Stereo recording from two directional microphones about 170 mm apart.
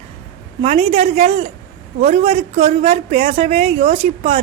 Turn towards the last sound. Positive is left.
turn(degrees=-35)  # may be behind; listen again after turning